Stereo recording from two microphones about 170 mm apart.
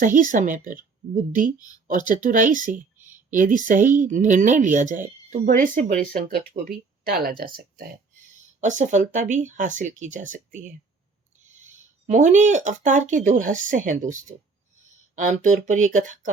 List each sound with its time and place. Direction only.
0.0 s speech: 50° right (ahead or behind)
1.5 s speech: 20° left (ahead or behind)
1.9 s speech: 50° right (ahead or behind)
8.6 s speech: 45° right (ahead or behind)